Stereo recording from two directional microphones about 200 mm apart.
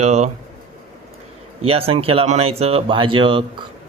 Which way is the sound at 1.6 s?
30° right (ahead or behind).